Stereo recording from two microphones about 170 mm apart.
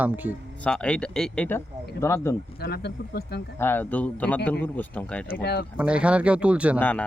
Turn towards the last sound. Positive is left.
turn(degrees=10)  # may be behind; listen again after turning